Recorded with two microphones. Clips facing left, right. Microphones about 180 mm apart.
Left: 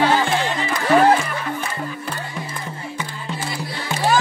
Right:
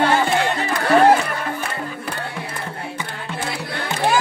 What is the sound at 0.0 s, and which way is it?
Music, 50° right (ahead or behind).